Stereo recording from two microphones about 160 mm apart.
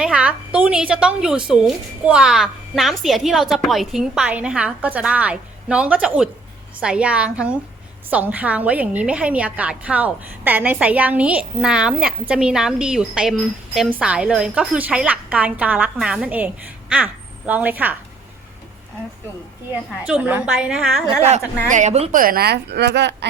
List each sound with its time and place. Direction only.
0.0 s a woman's voice: 5° right (ahead or behind)
20.1 s a woman's voice: 10° right (ahead or behind)
21.2 s a woman's voice: 45° right (ahead or behind)
22.1 s a woman's voice: 65° right (ahead or behind); by 23.1 s 90° right